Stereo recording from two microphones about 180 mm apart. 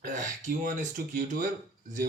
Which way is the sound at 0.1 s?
45° right (ahead or behind).